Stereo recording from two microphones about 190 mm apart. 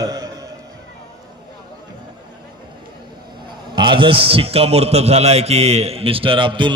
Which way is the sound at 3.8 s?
25° right (ahead or behind).